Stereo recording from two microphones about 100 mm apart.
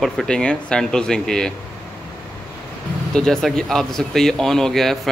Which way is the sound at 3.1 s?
5° left (ahead or behind).